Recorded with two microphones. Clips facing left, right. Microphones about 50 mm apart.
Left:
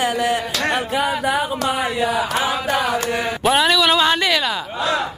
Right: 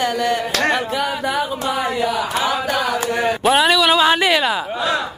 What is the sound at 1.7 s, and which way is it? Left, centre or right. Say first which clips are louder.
Speech: right 1 dB; left.